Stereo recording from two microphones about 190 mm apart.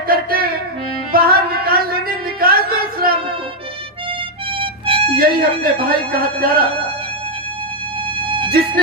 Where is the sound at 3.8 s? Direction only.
25° right (ahead or behind).